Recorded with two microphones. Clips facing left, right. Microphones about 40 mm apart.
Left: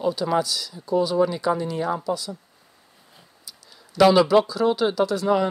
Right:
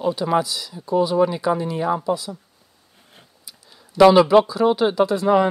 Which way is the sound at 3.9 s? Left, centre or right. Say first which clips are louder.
Right 4 dB; centre.